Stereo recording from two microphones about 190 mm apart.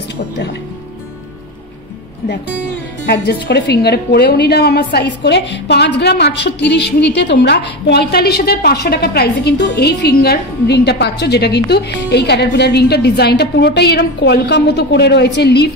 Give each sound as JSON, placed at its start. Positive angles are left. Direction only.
{"t": 3.1, "sound": "a woman's voice", "side_deg": 60}